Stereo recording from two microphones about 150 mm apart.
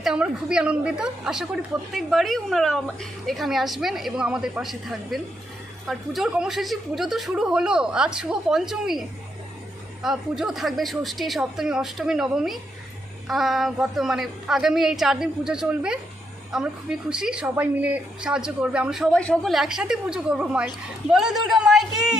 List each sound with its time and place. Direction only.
0.0 s a woman's voice: 5° right (ahead or behind)
10.0 s a woman's voice: centre (ahead or behind)